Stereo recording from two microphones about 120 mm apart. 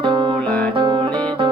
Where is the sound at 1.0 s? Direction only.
10° left (ahead or behind).